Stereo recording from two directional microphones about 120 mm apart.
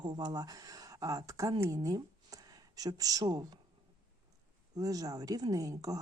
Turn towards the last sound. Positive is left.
turn(degrees=-30)  # may be behind; listen again after turning